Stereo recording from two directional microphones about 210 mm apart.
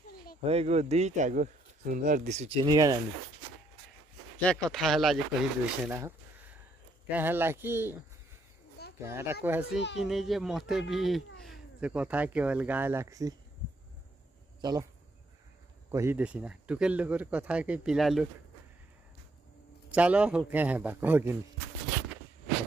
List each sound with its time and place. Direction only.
0.5 s speech: 30° right (ahead or behind)
2.6 s speech: 20° right (ahead or behind)
4.4 s speech: 5° left (ahead or behind)
5.9 s a sound: 10° right (ahead or behind)
7.1 s speech: 10° right (ahead or behind)
9.0 s speech: 10° right (ahead or behind)
14.6 s speech: 20° right (ahead or behind)
15.9 s speech: 10° right (ahead or behind)
19.9 s speech: 5° right (ahead or behind)